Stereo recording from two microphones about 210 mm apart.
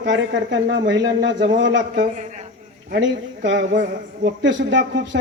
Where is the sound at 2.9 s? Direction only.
60° right (ahead or behind).